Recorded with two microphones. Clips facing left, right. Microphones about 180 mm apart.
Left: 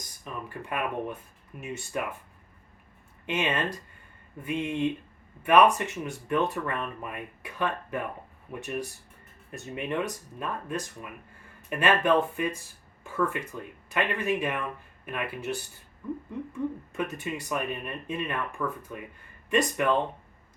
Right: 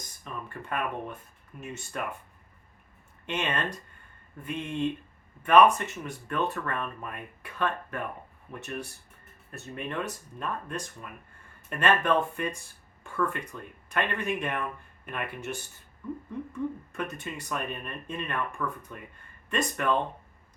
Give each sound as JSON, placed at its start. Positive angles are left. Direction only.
{"t": 0.4, "sound": "speech", "side_deg": 10}
{"t": 3.2, "sound": "speech", "side_deg": 5}